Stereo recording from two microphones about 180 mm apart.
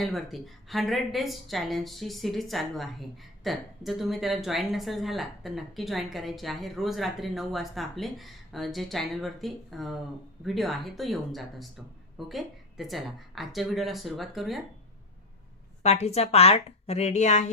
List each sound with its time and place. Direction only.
0.0 s a woman's voice: centre (ahead or behind)
15.8 s speech: 35° left (ahead or behind)